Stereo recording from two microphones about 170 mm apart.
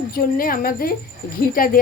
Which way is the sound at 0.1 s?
60° left (ahead or behind).